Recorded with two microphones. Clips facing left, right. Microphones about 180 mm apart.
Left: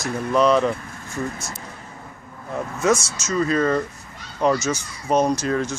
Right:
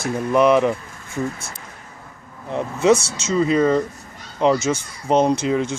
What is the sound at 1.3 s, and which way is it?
Speech, 55° right (ahead or behind).